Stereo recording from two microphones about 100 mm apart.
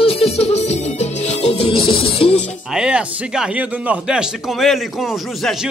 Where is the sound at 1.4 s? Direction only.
85° left; by 2.4 s 65° left (ahead or behind).